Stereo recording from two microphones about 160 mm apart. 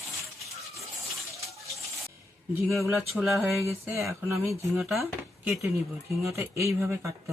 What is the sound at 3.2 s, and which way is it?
Speech, centre (ahead or behind).